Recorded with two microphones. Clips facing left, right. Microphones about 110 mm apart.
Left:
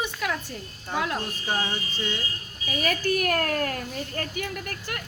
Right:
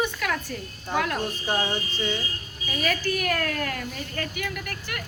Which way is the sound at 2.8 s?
45° left (ahead or behind).